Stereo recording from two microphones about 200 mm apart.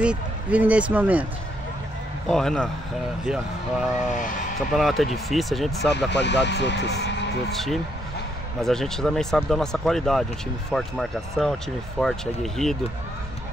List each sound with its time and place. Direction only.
0.0 s speech: 5° right (ahead or behind)
2.2 s speech: 5° left (ahead or behind)
5.9 s speech: 60° left (ahead or behind)
7.5 s speech: centre (ahead or behind)